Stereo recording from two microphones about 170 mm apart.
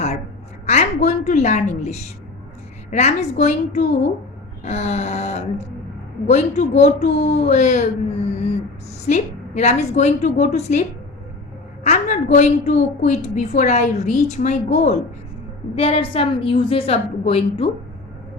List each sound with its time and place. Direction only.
0.6 s a woman's voice: 40° left (ahead or behind)
9.0 s a woman's voice: 40° left (ahead or behind)